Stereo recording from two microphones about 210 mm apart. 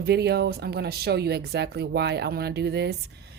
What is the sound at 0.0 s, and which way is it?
A woman's voice, 50° right (ahead or behind).